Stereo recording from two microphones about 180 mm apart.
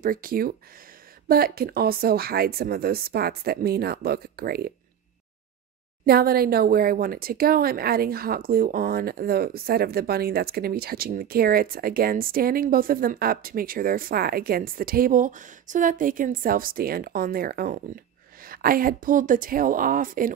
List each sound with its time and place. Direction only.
0.0 s speech: 50° right (ahead or behind)
6.0 s speech: 55° right (ahead or behind)